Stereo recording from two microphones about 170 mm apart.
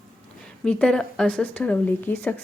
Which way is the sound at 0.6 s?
5° left (ahead or behind).